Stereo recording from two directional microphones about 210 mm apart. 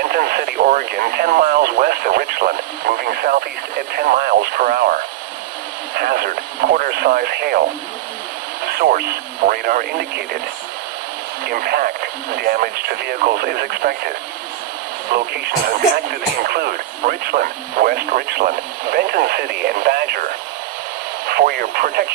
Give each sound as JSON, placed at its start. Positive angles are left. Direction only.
{"t": 0.0, "sound": "speech", "side_deg": -45}
{"t": 8.6, "sound": "speech", "side_deg": -50}
{"t": 11.4, "sound": "speech", "side_deg": -50}